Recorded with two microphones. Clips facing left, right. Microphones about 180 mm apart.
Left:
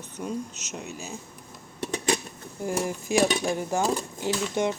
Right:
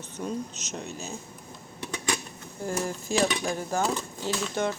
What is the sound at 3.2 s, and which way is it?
Speech, 25° left (ahead or behind).